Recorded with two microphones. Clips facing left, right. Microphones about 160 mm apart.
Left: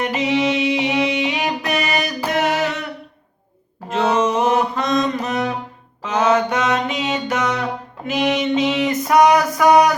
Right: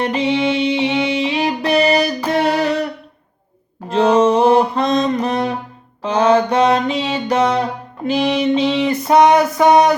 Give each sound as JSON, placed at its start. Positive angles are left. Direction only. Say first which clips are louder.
{"t": 0.0, "sound": "music", "louder": "right 2 dB", "side_deg": -30}
{"t": 3.8, "sound": "music", "louder": "right 5 dB", "side_deg": -35}
{"t": 6.0, "sound": "mantra", "louder": "right 3 dB", "side_deg": -30}
{"t": 8.9, "sound": "a sound", "louder": "right 2 dB", "side_deg": -30}